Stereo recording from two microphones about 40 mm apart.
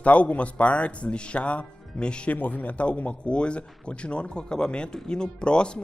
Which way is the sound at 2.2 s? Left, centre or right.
Left.